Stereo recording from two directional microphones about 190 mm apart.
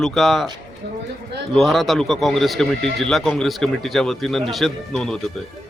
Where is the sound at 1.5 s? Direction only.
Centre (ahead or behind).